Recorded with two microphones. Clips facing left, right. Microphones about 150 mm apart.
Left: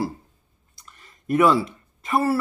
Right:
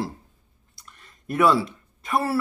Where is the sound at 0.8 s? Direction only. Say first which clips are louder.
Left 4 dB; 10° left (ahead or behind).